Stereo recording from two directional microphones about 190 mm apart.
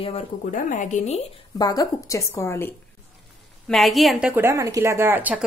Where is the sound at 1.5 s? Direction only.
20° left (ahead or behind).